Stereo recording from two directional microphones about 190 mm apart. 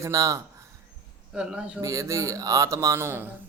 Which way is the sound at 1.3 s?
5° right (ahead or behind).